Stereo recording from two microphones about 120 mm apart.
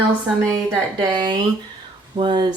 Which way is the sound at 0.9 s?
40° right (ahead or behind).